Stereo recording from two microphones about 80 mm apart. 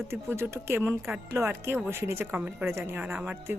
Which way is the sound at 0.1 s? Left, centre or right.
Right.